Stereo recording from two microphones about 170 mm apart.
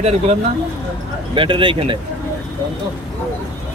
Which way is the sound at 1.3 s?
30° right (ahead or behind).